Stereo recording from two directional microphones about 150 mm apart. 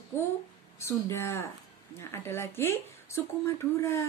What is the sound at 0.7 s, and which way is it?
Speech, 20° left (ahead or behind).